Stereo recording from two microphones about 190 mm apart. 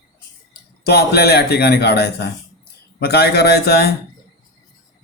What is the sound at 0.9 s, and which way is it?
Speech, 60° left (ahead or behind).